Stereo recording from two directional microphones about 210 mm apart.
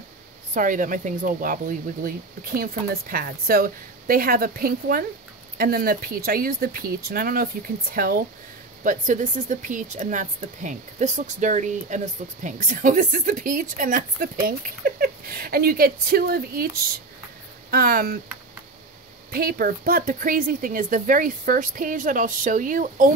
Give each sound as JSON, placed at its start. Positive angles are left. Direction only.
{"t": 0.6, "sound": "speech", "side_deg": -40}
{"t": 17.6, "sound": "speech", "side_deg": -45}
{"t": 19.3, "sound": "speech", "side_deg": -45}